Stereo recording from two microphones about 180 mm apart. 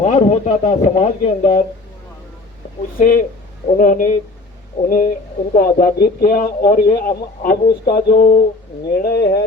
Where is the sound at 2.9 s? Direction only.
50° left (ahead or behind).